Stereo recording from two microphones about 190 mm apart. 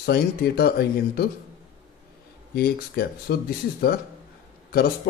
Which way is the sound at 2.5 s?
55° left (ahead or behind).